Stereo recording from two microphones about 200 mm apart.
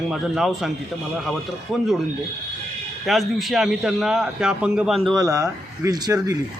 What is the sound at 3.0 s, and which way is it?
Speech, centre (ahead or behind).